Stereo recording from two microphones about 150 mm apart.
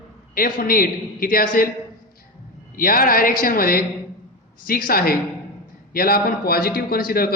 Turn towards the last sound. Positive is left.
turn(degrees=80)